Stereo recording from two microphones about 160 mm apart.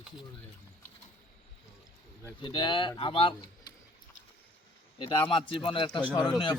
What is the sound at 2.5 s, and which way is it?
Speech, 30° left (ahead or behind).